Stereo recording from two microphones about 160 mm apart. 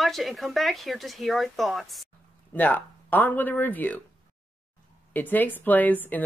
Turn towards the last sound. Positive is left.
turn(degrees=10)  # may be behind; listen again after turning